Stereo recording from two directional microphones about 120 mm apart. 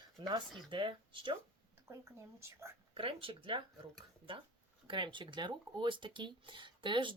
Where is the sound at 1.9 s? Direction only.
20° right (ahead or behind).